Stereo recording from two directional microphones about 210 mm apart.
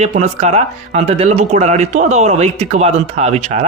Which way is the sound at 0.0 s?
35° right (ahead or behind).